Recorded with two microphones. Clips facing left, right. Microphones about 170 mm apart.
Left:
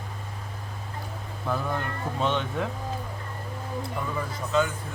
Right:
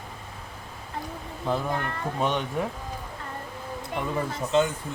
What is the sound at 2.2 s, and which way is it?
Speech, 15° right (ahead or behind).